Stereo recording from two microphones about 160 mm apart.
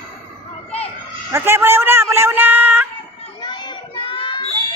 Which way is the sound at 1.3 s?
15° right (ahead or behind).